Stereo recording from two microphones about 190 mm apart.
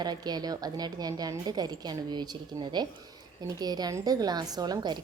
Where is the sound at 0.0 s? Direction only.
20° right (ahead or behind).